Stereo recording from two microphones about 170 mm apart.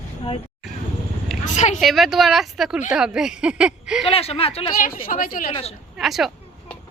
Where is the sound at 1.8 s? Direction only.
Centre (ahead or behind).